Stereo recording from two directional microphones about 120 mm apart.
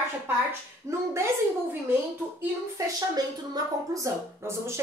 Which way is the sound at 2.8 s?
30° right (ahead or behind).